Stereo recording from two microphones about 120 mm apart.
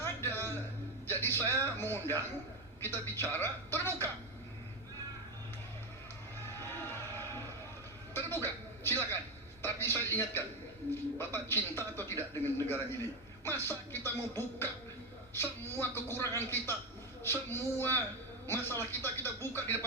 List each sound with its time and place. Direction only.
0.0 s a sound: 20° left (ahead or behind)
1.8 s a man's voice: 20° left (ahead or behind)
6.6 s music: 20° left (ahead or behind)
9.6 s a man's voice: 20° left (ahead or behind)